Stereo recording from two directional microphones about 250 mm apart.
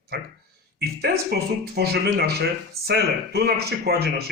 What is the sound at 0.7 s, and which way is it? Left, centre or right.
Speech, right.